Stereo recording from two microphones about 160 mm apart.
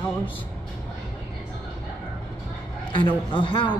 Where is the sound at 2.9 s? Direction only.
30° left (ahead or behind).